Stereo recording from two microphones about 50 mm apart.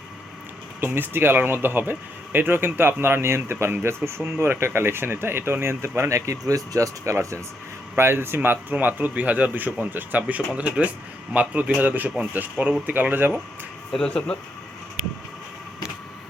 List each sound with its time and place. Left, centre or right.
0.8 s speech: right
6.1 s speech: right
7.9 s speech: right
8.7 s a man's voice: right
14.1 s speech: left